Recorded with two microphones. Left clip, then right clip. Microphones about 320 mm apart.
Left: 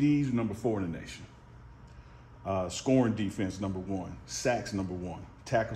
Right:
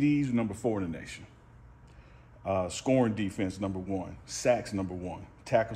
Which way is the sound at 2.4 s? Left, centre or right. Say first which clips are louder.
Right 2 dB; right.